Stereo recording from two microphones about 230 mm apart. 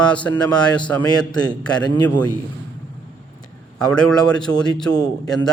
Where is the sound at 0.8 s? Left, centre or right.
Centre.